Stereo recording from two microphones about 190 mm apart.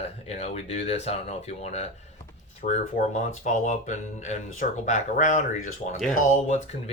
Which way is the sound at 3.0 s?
40° left (ahead or behind).